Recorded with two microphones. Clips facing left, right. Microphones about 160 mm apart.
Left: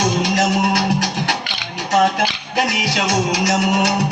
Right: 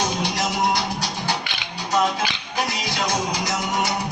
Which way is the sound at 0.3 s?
75° left (ahead or behind).